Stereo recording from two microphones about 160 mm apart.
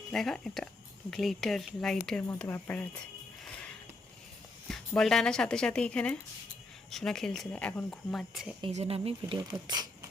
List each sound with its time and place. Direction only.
0.1 s speech: 5° left (ahead or behind)
4.7 s speech: 5° left (ahead or behind)
8.6 s speech: 40° right (ahead or behind)
9.4 s speech: 25° right (ahead or behind)